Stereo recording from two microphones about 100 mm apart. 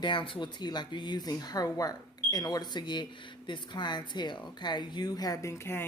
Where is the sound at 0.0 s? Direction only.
50° left (ahead or behind).